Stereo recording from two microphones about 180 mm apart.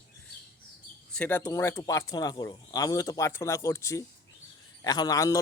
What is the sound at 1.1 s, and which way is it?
Speech, 10° left (ahead or behind).